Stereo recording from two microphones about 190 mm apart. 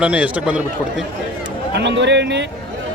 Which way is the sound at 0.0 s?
5° right (ahead or behind).